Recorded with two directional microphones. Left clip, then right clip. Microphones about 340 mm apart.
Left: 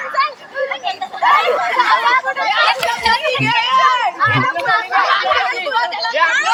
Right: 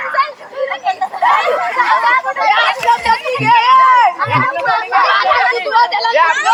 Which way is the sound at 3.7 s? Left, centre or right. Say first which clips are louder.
Right 6 dB; centre.